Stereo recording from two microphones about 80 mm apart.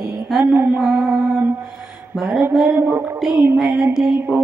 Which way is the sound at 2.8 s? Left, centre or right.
Right.